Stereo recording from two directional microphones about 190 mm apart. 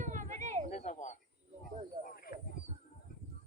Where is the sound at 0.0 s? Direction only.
40° right (ahead or behind).